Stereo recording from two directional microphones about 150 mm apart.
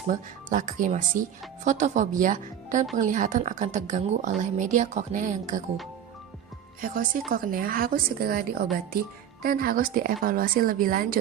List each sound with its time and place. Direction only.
0.1 s speech: 60° right (ahead or behind)
6.8 s a woman's voice: 70° right (ahead or behind)